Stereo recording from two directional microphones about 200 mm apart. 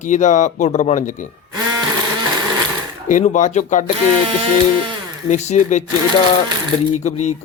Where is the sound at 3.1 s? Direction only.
40° left (ahead or behind).